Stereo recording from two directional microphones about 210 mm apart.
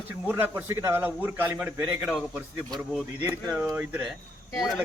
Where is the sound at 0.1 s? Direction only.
10° right (ahead or behind).